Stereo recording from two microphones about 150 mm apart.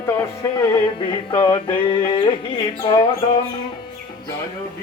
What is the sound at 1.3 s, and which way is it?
Music, 35° left (ahead or behind).